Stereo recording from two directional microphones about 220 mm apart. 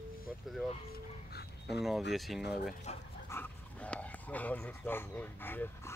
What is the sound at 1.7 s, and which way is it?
Speech, centre (ahead or behind).